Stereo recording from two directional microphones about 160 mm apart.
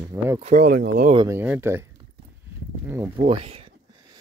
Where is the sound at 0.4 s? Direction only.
50° right (ahead or behind).